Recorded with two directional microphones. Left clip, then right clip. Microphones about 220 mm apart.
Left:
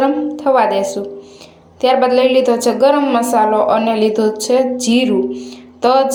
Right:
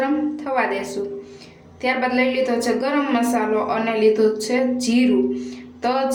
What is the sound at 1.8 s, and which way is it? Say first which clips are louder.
A woman's voice: left 9 dB; 30° left (ahead or behind).